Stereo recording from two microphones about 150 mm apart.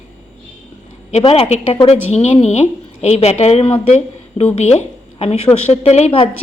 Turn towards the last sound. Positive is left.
turn(degrees=40)  # may be behind; listen again after turning